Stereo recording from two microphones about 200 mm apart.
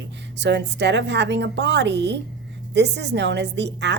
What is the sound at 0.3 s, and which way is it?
A woman's voice, 60° right (ahead or behind).